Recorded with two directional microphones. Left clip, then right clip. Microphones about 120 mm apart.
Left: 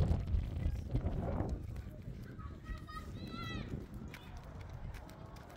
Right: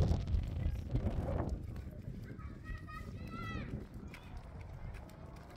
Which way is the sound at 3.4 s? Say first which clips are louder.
Even; 45° right (ahead or behind).